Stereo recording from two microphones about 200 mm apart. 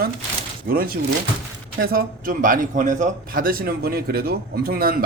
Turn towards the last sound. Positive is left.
turn(degrees=-50)  # may be behind; listen again after turning